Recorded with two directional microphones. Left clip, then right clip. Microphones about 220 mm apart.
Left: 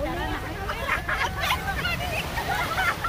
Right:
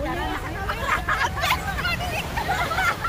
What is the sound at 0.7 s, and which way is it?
Vehicle, 20° right (ahead or behind).